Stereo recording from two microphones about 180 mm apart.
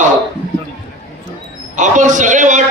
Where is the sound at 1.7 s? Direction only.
45° right (ahead or behind).